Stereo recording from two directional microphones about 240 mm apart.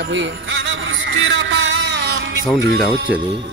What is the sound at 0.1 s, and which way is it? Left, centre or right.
Music, right.